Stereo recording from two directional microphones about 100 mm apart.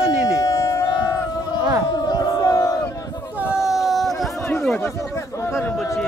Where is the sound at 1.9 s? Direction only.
40° left (ahead or behind).